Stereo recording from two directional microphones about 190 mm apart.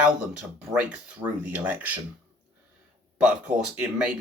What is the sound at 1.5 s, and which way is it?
Speech, 10° right (ahead or behind).